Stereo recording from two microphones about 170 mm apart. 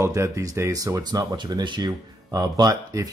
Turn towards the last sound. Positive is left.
turn(degrees=-20)  # may be behind; listen again after turning